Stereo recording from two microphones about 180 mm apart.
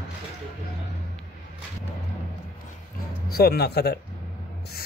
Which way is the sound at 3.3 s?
60° left (ahead or behind).